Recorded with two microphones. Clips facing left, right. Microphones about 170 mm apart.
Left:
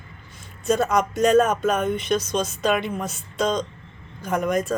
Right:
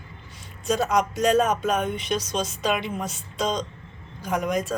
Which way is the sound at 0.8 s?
50° left (ahead or behind).